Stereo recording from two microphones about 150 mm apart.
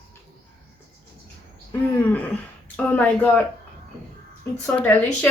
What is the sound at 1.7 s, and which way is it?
Throat clearing, 10° left (ahead or behind).